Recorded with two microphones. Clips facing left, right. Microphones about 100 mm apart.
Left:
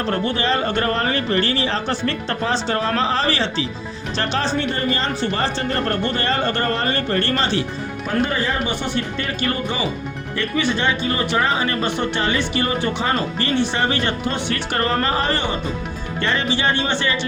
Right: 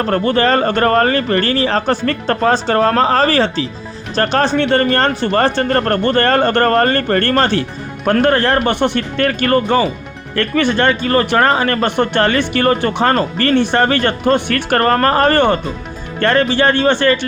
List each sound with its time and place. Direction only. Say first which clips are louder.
0.0 s speech: right 7 dB; 50° right (ahead or behind)
8.0 s speech: right 9 dB; 70° right (ahead or behind); by 17.2 s 55° right (ahead or behind)